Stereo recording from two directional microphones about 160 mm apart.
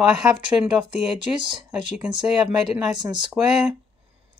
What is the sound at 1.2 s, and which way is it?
Speech, 30° right (ahead or behind).